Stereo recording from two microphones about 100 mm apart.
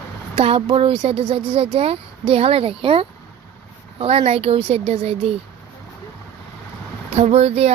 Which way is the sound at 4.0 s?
90° right.